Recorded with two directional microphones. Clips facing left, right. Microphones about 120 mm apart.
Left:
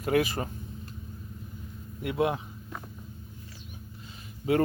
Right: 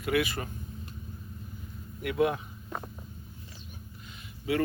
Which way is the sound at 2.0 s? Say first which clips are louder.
Even; 25° left (ahead or behind).